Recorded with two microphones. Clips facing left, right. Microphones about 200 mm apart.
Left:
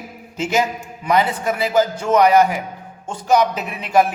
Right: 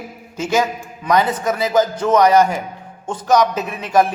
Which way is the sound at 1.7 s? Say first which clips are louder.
Right 1 dB; 10° left (ahead or behind).